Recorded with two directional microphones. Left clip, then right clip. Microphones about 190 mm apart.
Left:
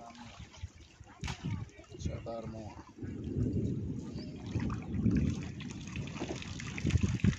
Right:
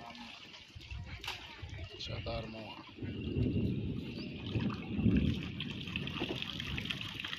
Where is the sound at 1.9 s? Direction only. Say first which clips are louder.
Right 1 dB; 65° left (ahead or behind).